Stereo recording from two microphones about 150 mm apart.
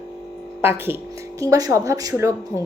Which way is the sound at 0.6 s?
15° right (ahead or behind).